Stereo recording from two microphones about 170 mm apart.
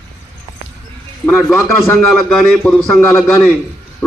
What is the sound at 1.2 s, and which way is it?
A man's voice, centre (ahead or behind).